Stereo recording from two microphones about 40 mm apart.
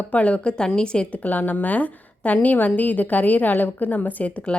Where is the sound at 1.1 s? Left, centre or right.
Left.